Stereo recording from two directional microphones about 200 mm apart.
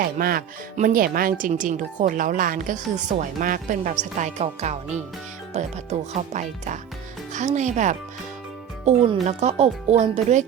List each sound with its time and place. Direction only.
0.0 s speech: 45° right (ahead or behind)